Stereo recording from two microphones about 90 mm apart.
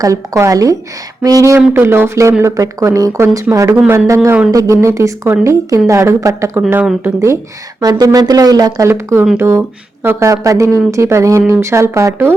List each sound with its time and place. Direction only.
0.0 s speech: 35° right (ahead or behind)
1.8 s speech: 25° right (ahead or behind)
7.8 s speech: 45° right (ahead or behind)
8.9 s speech: 30° right (ahead or behind)
10.2 s speech: 40° right (ahead or behind)